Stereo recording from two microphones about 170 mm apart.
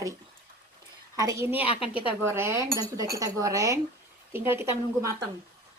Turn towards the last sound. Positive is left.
turn(degrees=-15)  # may be behind; listen again after turning